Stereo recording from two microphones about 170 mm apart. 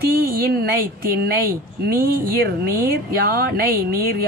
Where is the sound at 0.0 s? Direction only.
60° right (ahead or behind).